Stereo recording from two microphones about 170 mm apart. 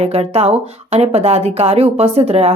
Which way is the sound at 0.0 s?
35° right (ahead or behind).